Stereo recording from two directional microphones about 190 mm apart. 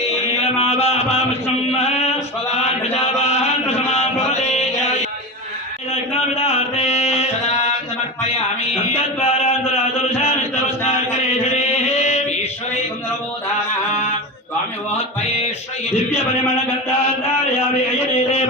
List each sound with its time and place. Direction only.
0.4 s chant: 35° left (ahead or behind)
2.6 s mantra: 35° left (ahead or behind)
5.9 s mantra: 35° left (ahead or behind)
9.2 s chant: 35° left (ahead or behind)
11.9 s mantra: 35° left (ahead or behind)
18.0 s a man's voice: 35° left (ahead or behind)